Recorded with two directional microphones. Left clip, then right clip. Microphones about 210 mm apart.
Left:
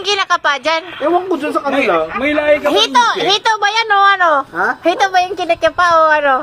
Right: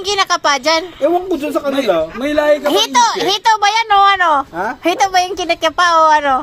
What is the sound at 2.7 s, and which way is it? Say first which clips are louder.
A child's voice: left 1 dB; 55° right (ahead or behind).